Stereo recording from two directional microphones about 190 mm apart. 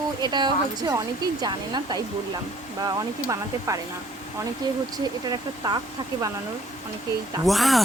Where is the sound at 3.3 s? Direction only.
15° right (ahead or behind).